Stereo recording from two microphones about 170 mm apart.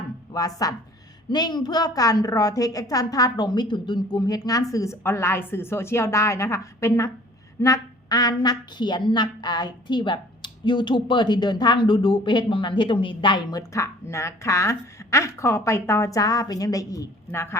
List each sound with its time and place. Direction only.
0.3 s a woman's voice: 20° left (ahead or behind)